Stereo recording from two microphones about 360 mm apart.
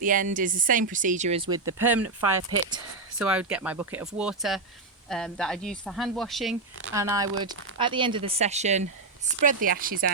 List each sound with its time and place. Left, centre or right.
0.0 s speech: right